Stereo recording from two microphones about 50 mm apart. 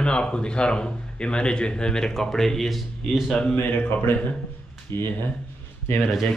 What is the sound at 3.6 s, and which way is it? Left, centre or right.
Speech, left.